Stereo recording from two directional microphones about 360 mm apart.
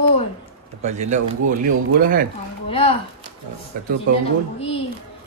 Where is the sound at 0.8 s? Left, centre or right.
Centre.